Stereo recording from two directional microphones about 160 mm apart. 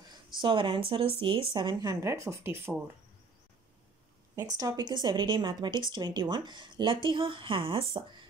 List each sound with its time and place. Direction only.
0.0 s speech: 30° right (ahead or behind)
4.4 s speech: 20° right (ahead or behind)